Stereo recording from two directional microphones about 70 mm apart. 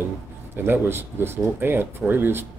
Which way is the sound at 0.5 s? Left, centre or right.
Right.